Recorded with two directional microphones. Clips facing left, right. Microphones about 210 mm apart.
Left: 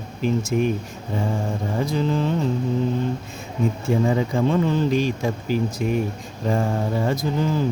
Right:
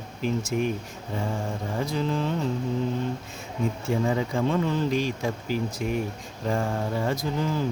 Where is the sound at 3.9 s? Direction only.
25° left (ahead or behind).